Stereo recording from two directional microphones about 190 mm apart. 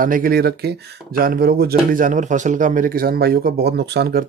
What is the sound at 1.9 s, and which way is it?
Speech, 45° right (ahead or behind).